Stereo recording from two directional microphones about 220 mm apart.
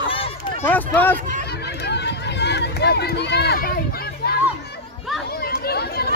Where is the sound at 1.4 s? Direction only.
50° left (ahead or behind).